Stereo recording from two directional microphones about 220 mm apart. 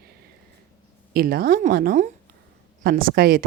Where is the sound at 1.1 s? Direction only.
40° right (ahead or behind).